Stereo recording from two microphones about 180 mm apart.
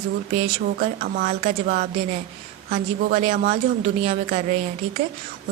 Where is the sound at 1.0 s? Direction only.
50° right (ahead or behind).